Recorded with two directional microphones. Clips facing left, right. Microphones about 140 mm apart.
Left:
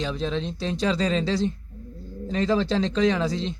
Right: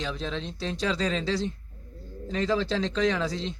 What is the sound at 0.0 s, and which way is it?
A man's voice, 30° left (ahead or behind).